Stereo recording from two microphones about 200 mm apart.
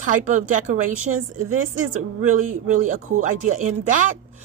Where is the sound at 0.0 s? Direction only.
40° right (ahead or behind).